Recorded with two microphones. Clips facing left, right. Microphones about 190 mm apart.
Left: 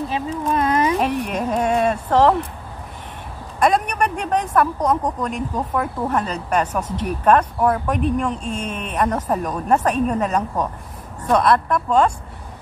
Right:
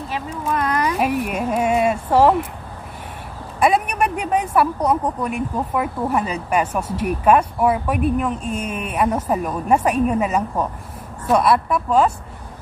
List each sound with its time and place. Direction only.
0.5 s a sound: 25° left (ahead or behind)
0.9 s speech: 5° right (ahead or behind)
3.5 s speech: 5° right (ahead or behind)